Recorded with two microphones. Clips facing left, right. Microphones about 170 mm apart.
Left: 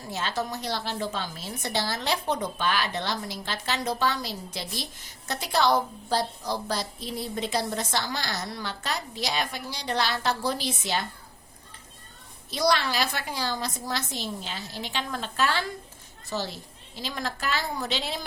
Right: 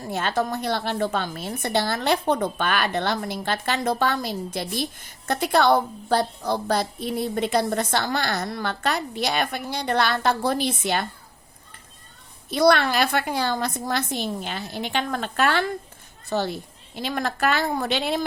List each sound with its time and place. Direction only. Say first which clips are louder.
0.1 s a woman's voice: right 6 dB; 55° right (ahead or behind)
12.5 s a woman's voice: right 7 dB; 60° right (ahead or behind)